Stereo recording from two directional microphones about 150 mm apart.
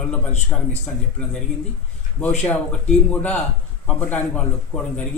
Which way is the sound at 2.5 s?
10° left (ahead or behind).